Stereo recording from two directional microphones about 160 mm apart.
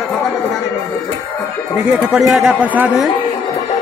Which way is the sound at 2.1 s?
Centre (ahead or behind).